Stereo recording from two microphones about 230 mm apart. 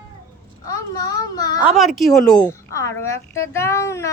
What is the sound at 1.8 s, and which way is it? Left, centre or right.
A child's voice, centre.